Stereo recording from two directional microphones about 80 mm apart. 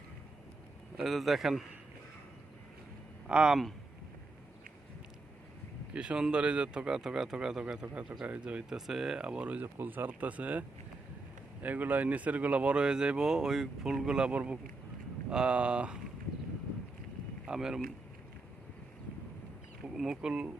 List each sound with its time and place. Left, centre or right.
1.0 s a man's voice: centre
3.2 s speech: centre
5.9 s speech: centre
17.4 s speech: centre
20.0 s speech: centre